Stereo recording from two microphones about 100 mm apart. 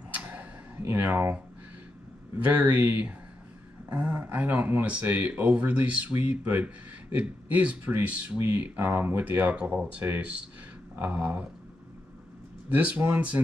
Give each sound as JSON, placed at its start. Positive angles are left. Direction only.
{"t": 0.1, "sound": "a sound", "side_deg": -15}
{"t": 2.3, "sound": "speech", "side_deg": -15}
{"t": 12.6, "sound": "speech", "side_deg": -15}